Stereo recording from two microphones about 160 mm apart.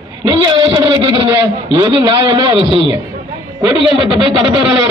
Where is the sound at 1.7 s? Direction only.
35° right (ahead or behind).